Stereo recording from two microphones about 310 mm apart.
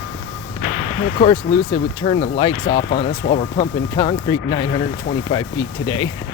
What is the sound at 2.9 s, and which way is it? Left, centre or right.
Speech, left.